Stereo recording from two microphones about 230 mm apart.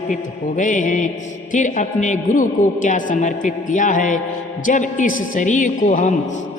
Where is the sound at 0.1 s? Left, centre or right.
Left.